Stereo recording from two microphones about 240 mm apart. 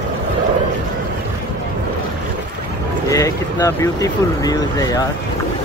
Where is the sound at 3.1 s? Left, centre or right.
Centre.